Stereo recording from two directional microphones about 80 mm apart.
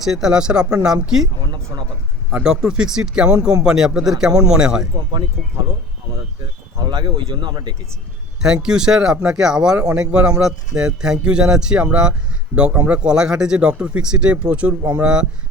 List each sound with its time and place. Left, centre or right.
0.0 s speech: centre
2.4 s speech: centre
6.4 s speech: right
8.4 s speech: centre